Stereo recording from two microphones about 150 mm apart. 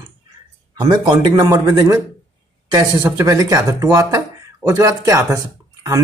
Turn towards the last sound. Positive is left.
turn(degrees=-25)  # may be behind; listen again after turning